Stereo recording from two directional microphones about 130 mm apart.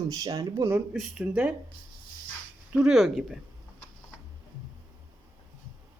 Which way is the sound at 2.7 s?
5° right (ahead or behind).